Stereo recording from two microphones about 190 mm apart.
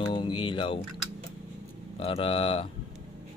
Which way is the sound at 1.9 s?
30° left (ahead or behind).